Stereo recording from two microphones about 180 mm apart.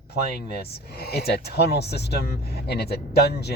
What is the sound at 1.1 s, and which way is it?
Speech, 65° left (ahead or behind).